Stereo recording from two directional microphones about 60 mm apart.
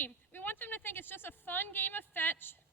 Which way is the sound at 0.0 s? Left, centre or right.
Left.